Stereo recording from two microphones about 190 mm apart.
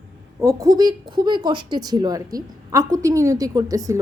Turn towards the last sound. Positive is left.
turn(degrees=-15)  # may be behind; listen again after turning